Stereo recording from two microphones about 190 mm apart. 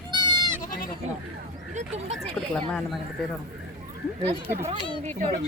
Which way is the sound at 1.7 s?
35° right (ahead or behind).